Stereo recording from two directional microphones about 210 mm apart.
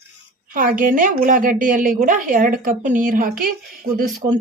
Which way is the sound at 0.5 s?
40° right (ahead or behind).